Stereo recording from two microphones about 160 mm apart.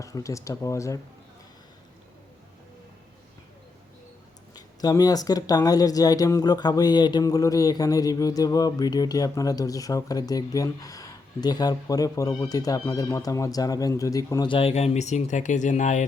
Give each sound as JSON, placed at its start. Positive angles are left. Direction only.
{"t": 0.0, "sound": "speech", "side_deg": 20}
{"t": 4.5, "sound": "speech", "side_deg": 25}